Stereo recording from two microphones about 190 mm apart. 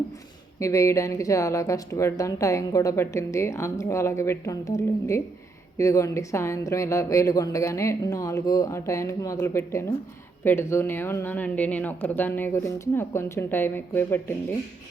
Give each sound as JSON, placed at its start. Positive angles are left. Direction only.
{"t": 0.6, "sound": "speech", "side_deg": 15}